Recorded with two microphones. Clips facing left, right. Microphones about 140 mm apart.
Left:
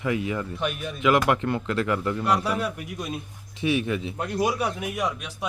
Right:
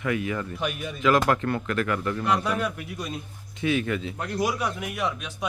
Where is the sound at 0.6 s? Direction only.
Centre (ahead or behind).